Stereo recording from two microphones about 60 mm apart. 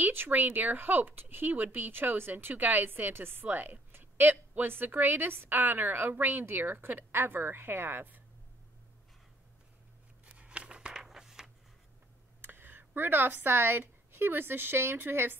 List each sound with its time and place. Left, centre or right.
0.0 s speech: right
10.3 s a sound: centre
12.4 s speech: right